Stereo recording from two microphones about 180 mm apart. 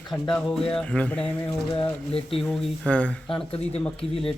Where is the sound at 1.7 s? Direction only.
30° left (ahead or behind).